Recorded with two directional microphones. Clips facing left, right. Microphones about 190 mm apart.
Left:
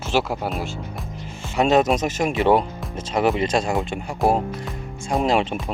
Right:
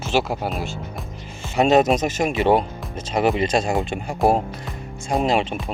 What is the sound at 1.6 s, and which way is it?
Speech, 20° right (ahead or behind).